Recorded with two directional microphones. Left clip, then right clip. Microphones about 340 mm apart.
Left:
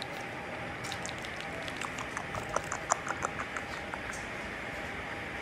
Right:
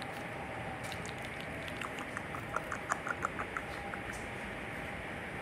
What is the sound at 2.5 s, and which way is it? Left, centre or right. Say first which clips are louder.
Patter: left 4 dB; centre.